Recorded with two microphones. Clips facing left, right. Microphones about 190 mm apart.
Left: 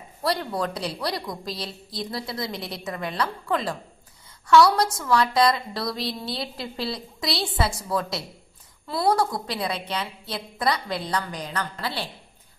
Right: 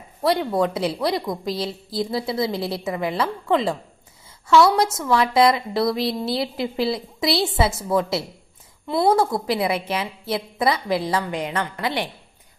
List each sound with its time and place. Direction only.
0.2 s a woman's voice: 25° right (ahead or behind)